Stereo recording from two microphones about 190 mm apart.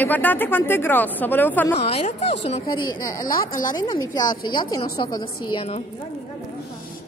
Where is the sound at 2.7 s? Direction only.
50° left (ahead or behind).